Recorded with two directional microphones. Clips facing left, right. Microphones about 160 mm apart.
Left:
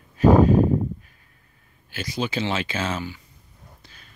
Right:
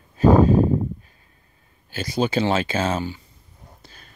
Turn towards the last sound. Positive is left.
turn(degrees=-30)  # may be behind; listen again after turning